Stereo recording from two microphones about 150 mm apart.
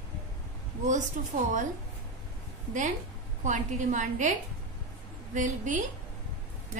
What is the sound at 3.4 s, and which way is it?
Speech, 55° right (ahead or behind).